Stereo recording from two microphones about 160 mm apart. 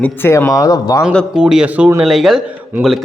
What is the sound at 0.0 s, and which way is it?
Speech, 15° left (ahead or behind).